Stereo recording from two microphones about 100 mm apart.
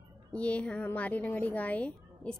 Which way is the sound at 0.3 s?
10° left (ahead or behind).